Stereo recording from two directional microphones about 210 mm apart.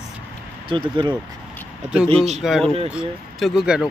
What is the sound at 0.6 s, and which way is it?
Speech, 25° right (ahead or behind).